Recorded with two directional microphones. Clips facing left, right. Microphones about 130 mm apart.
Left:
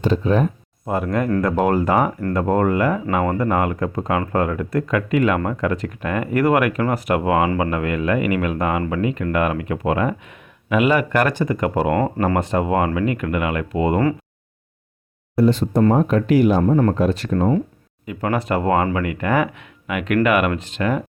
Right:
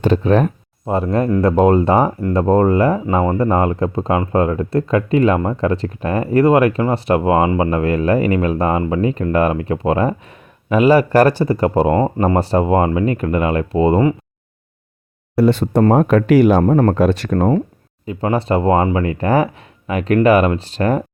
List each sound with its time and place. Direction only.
0.0 s speech: 70° right (ahead or behind)
0.9 s speech: 30° right (ahead or behind)
15.4 s speech: 65° right (ahead or behind)
18.0 s speech: 30° right (ahead or behind)